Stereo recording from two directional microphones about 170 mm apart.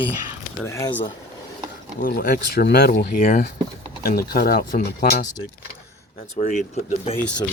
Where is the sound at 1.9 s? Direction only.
55° left (ahead or behind); by 2.9 s 75° left (ahead or behind).